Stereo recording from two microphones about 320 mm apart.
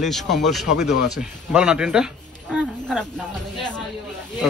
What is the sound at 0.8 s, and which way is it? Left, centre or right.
Speech, left.